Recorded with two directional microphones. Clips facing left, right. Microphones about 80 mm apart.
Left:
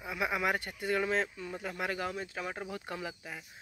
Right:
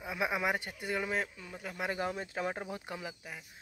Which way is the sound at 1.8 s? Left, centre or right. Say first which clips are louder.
Right 2 dB; right.